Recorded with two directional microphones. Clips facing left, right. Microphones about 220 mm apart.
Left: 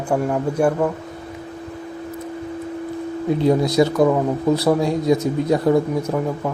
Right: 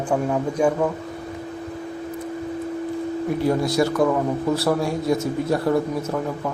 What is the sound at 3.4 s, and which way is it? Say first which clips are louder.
Speech: left 4 dB; 20° left (ahead or behind).